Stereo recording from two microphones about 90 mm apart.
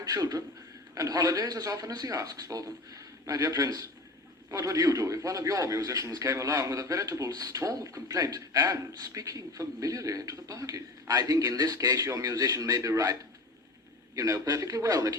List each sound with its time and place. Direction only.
0.0 s speech: 40° right (ahead or behind)
14.2 s speech: 40° right (ahead or behind)